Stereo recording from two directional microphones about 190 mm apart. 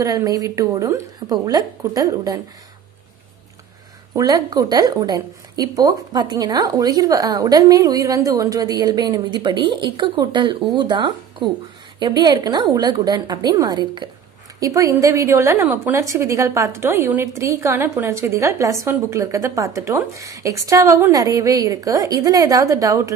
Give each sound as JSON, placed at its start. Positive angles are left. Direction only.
{"t": 0.0, "sound": "a woman's voice", "side_deg": -20}
{"t": 4.1, "sound": "a woman's voice", "side_deg": -20}